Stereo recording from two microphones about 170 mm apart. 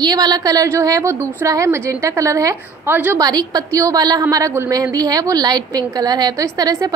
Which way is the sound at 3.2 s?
20° right (ahead or behind).